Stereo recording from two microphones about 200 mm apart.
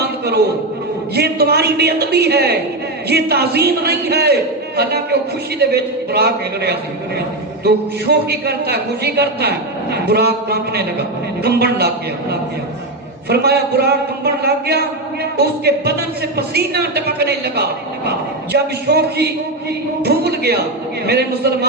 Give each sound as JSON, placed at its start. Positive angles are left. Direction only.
{"t": 0.0, "sound": "a sound", "side_deg": -55}
{"t": 1.1, "sound": "a man's voice", "side_deg": -55}
{"t": 13.2, "sound": "a man's voice", "side_deg": -55}